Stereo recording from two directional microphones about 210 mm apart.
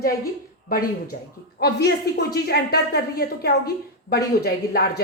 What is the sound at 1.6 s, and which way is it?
Speech, 50° left (ahead or behind).